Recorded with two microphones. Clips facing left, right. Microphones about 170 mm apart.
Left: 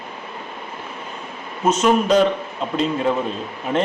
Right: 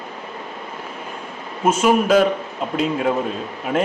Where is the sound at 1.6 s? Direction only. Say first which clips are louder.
Even; 10° right (ahead or behind).